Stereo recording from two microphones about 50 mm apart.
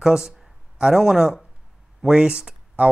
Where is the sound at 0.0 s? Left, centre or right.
Centre.